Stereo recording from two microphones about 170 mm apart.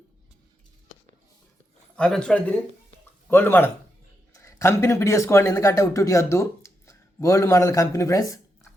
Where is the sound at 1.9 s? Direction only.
5° left (ahead or behind); by 8.4 s 20° left (ahead or behind).